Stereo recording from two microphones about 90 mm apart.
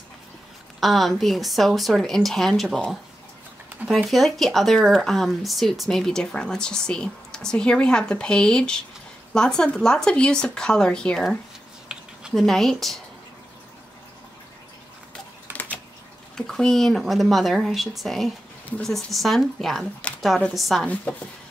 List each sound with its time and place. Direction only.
0.7 s a woman's voice: centre (ahead or behind)
3.9 s speech: centre (ahead or behind)
11.9 s a sound: 10° right (ahead or behind)
12.4 s a woman's voice: 5° left (ahead or behind)
15.5 s a sound: 20° right (ahead or behind)
16.3 s a woman's voice: 5° left (ahead or behind)
20.8 s speech: 15° left (ahead or behind)